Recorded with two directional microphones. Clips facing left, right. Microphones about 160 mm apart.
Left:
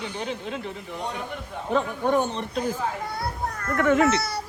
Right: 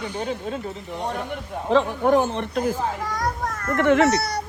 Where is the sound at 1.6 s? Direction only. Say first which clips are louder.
Right 5 dB; 90° right.